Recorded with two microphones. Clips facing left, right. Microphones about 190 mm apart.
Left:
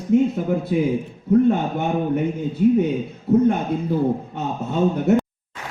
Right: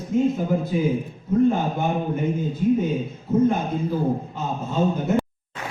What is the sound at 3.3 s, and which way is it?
A man's voice, 65° left (ahead or behind).